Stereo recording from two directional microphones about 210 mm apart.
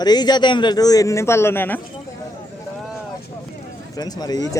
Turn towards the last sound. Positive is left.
turn(degrees=15)  # may be behind; listen again after turning